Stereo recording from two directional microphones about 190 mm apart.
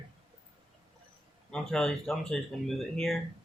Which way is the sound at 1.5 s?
5° left (ahead or behind).